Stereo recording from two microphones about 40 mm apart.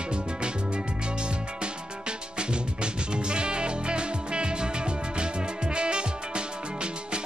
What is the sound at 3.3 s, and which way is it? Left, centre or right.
Music, right.